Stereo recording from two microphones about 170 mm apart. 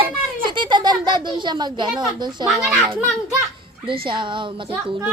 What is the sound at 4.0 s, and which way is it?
Speech, 30° right (ahead or behind).